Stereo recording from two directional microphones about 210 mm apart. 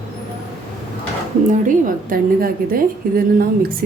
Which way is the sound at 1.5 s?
40° right (ahead or behind).